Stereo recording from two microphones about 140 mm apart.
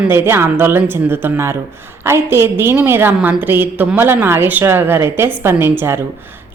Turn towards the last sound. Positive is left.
turn(degrees=-15)  # may be behind; listen again after turning